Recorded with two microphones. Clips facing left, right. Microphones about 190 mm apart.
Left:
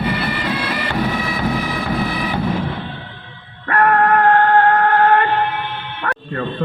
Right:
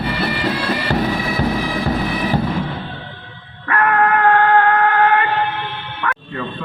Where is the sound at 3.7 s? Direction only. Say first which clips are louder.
Left 2 dB; 40° left (ahead or behind).